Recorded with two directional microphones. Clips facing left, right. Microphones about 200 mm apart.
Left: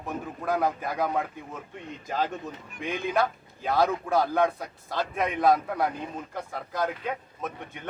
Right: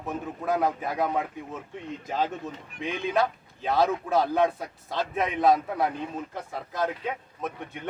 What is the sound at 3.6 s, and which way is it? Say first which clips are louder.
Speech: even; centre (ahead or behind).